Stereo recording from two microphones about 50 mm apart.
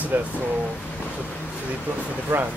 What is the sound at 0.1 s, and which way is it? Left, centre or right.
Speech, right.